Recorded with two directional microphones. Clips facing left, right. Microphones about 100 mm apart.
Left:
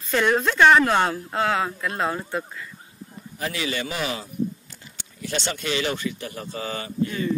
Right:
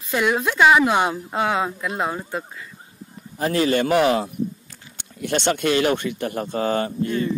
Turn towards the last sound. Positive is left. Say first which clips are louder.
# right 4 dB
turn(degrees=-55)  # may be behind; listen again after turning